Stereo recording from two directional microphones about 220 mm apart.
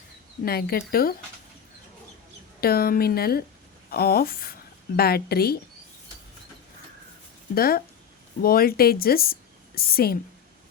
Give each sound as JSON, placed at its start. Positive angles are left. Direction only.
{"t": 0.4, "sound": "speech", "side_deg": 45}
{"t": 2.6, "sound": "speech", "side_deg": 45}
{"t": 7.5, "sound": "a woman's voice", "side_deg": 45}